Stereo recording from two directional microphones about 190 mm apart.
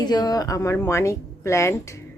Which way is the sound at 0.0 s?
20° left (ahead or behind).